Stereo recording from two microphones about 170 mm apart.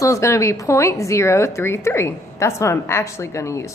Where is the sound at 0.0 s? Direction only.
15° left (ahead or behind).